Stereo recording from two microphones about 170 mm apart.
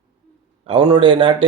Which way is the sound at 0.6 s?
25° right (ahead or behind).